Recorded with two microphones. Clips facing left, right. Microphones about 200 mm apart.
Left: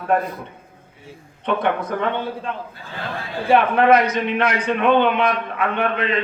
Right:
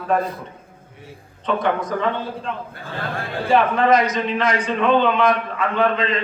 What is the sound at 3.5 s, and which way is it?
A man's voice, 60° left (ahead or behind).